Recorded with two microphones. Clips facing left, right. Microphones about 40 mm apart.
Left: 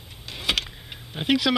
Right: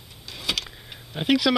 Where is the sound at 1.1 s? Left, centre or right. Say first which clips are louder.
Right 1 dB; centre.